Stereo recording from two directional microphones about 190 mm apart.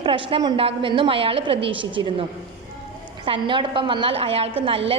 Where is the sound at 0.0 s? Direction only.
25° right (ahead or behind).